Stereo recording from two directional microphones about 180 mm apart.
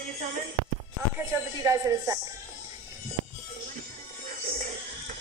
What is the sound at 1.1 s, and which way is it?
Speech, 15° right (ahead or behind).